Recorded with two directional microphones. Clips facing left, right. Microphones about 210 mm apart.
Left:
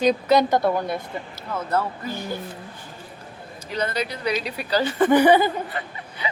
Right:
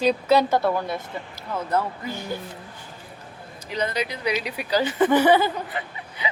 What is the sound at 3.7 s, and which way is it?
A woman's voice, 10° right (ahead or behind).